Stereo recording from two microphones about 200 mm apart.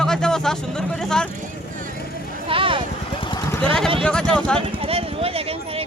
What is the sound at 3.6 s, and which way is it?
Speech, 5° left (ahead or behind).